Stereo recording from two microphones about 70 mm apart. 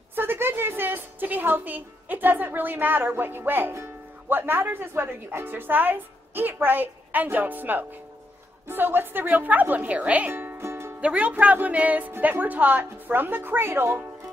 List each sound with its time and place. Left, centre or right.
0.1 s a woman's voice: right
10.3 s music: right
11.0 s a woman's voice: right